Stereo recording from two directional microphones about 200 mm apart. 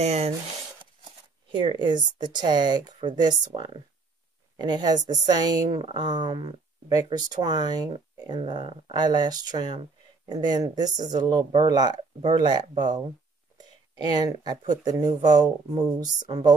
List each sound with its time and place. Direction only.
0.0 s speech: 30° right (ahead or behind)
1.5 s speech: 25° right (ahead or behind)
14.2 s speech: 20° right (ahead or behind)